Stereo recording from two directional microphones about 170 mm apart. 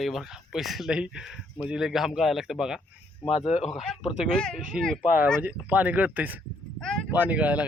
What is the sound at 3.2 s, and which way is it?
Speech, 40° left (ahead or behind).